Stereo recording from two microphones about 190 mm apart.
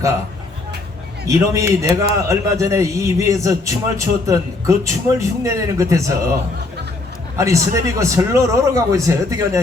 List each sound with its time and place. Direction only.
1.3 s a man's voice: 15° right (ahead or behind)
7.3 s a man's voice: 15° right (ahead or behind)